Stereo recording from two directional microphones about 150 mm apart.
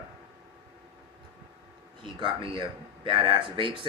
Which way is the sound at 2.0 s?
35° right (ahead or behind).